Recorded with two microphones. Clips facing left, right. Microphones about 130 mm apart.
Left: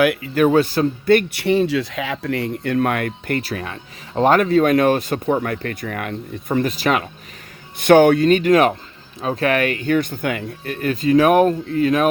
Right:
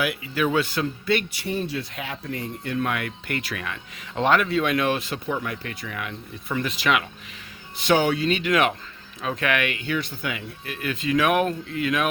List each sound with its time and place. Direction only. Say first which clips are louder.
0.0 s speech: left 9 dB; 55° left (ahead or behind); by 2.7 s 75° left (ahead or behind)
2.7 s speech: left 6 dB; 50° left (ahead or behind)
7.8 s speech: left 9 dB; 55° left (ahead or behind); by 12.0 s 40° left (ahead or behind)